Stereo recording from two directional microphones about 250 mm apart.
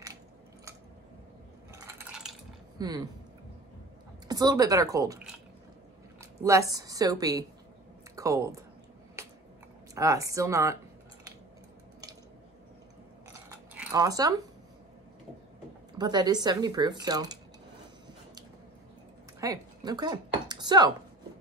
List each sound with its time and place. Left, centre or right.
1.7 s a sound: centre
2.8 s speech: centre
4.3 s speech: centre
6.4 s speech: centre
9.2 s a sound: centre
9.9 s speech: centre
13.5 s zipper: centre
15.9 s speech: centre
19.4 s a sound: centre